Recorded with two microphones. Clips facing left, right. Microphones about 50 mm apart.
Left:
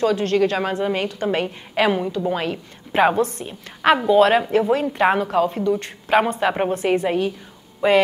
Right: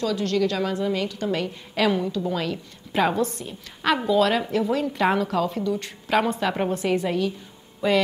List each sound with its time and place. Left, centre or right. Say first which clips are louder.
0.0 s a woman's voice: left 5 dB; left